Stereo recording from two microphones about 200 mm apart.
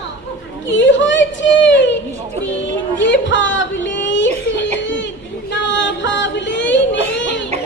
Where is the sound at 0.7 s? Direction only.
65° left (ahead or behind).